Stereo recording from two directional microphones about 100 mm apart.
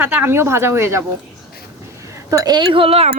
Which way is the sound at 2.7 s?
75° right (ahead or behind).